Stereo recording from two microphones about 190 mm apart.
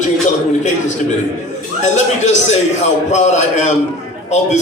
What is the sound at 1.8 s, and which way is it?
A man's voice, 35° left (ahead or behind).